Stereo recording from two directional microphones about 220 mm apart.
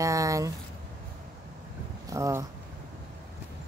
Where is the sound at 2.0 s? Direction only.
15° right (ahead or behind).